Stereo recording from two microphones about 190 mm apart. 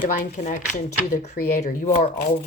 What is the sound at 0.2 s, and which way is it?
Speech, 40° left (ahead or behind).